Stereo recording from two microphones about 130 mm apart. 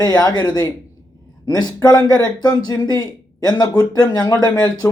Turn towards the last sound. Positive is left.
turn(degrees=30)  # may be behind; listen again after turning